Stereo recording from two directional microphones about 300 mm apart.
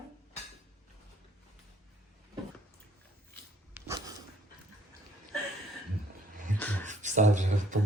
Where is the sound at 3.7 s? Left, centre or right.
Centre.